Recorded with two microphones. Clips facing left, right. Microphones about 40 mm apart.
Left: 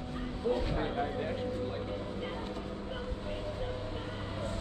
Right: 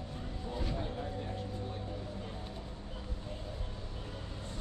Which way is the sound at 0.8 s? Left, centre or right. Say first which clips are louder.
Left 6 dB; left.